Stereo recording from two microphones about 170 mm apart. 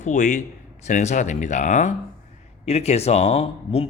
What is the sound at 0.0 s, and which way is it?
A man's voice, 50° left (ahead or behind).